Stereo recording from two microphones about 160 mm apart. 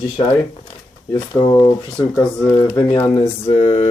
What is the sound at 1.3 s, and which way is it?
Speech, 25° left (ahead or behind).